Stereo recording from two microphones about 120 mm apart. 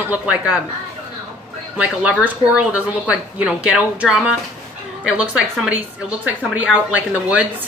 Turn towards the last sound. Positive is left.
turn(degrees=-10)  # may be behind; listen again after turning